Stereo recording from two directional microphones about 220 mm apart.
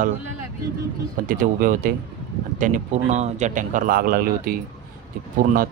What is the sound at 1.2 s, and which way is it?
Speech, 40° right (ahead or behind).